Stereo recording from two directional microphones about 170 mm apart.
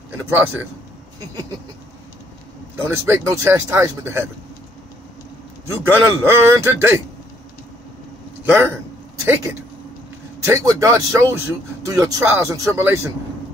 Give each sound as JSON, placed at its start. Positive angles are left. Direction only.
{"t": 0.3, "sound": "speech", "side_deg": -10}
{"t": 2.7, "sound": "speech", "side_deg": -15}
{"t": 5.7, "sound": "speech", "side_deg": -15}
{"t": 8.5, "sound": "speech", "side_deg": -15}